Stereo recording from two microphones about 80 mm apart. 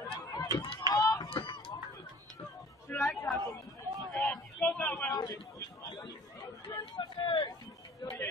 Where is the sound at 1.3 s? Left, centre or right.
Left.